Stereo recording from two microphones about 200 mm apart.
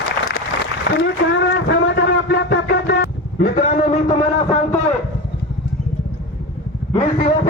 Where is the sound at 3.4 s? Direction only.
40° left (ahead or behind).